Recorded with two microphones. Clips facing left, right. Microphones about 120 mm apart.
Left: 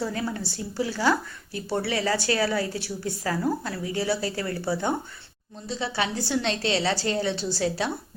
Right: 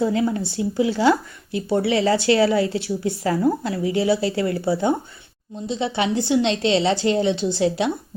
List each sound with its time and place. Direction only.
0.0 s speech: 20° right (ahead or behind)